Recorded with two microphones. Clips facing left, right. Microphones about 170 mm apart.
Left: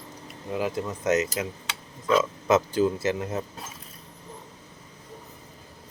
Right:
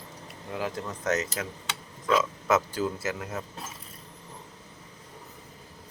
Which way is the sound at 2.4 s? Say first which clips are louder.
Left 4 dB; 20° left (ahead or behind).